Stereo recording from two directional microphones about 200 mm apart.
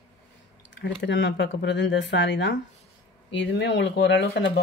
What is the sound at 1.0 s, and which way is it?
Speech, 60° left (ahead or behind).